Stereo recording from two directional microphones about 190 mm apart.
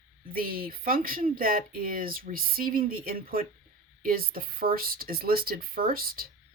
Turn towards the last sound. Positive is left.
turn(degrees=-50)  # may be behind; listen again after turning